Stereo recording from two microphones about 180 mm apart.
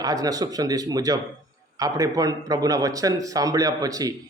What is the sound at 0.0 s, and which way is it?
A man's voice, 20° right (ahead or behind).